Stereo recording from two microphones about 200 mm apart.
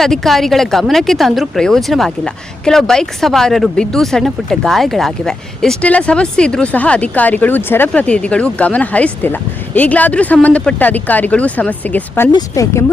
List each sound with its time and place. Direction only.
0.0 s speech: centre (ahead or behind)